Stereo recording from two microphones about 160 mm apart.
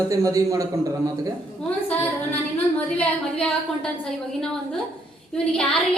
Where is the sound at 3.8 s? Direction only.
5° left (ahead or behind).